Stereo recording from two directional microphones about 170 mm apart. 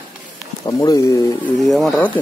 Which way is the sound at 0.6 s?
20° left (ahead or behind).